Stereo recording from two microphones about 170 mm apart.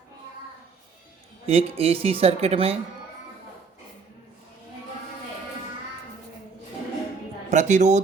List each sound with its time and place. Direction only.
1.5 s speech: 35° right (ahead or behind)
7.5 s speech: 45° right (ahead or behind)